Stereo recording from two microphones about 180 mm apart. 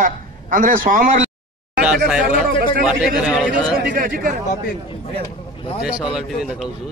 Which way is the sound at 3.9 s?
50° right (ahead or behind).